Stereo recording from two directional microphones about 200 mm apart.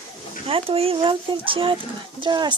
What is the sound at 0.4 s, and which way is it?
Speech, 30° right (ahead or behind).